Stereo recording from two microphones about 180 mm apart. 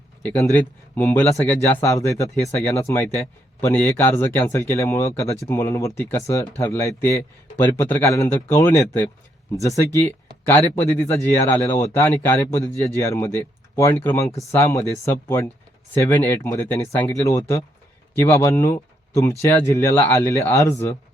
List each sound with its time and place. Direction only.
0.2 s speech: 15° left (ahead or behind)
18.2 s speech: 15° left (ahead or behind)